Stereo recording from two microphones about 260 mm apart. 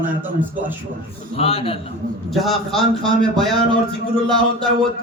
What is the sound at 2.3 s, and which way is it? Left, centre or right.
Speech, centre.